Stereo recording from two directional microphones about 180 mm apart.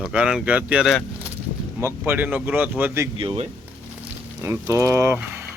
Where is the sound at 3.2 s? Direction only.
25° right (ahead or behind).